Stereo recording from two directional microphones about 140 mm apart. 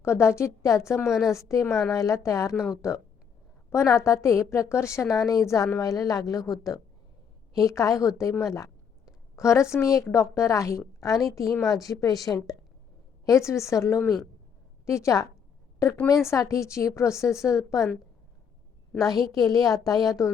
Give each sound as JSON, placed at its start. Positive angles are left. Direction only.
{"t": 0.0, "sound": "a woman's voice", "side_deg": 20}
{"t": 1.0, "sound": "a woman's voice", "side_deg": 0}
{"t": 1.3, "sound": "a woman's voice", "side_deg": 20}
{"t": 13.2, "sound": "a woman's voice", "side_deg": 20}
{"t": 19.3, "sound": "a woman's voice", "side_deg": 25}